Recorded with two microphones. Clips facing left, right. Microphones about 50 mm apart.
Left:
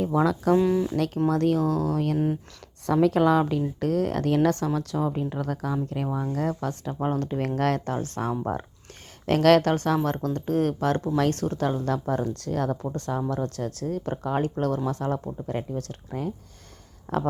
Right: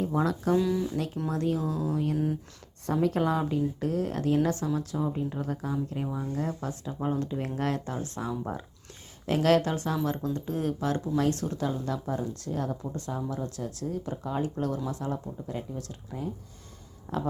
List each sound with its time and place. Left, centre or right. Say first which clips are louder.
0.5 s speech: left 4 dB; left
0.9 s speech: left 7 dB; left
2.1 s speech: left 4 dB; left
2.8 s a woman's voice: left 6 dB; left
7.0 s speech: left 4 dB; left
9.2 s speech: left 5 dB; left
12.4 s speech: left 5 dB; left
12.9 s speech: left 5 dB; left
17.1 s speech: left 5 dB; left